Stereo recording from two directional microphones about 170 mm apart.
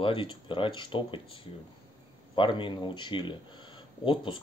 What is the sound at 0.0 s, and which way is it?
Speech, 30° left (ahead or behind).